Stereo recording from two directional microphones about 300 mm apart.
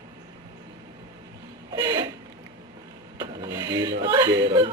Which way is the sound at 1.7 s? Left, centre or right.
Centre.